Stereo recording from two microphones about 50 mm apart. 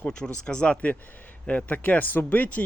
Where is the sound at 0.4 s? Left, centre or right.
Left.